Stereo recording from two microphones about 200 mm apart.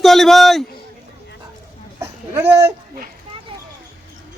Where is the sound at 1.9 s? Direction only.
15° right (ahead or behind).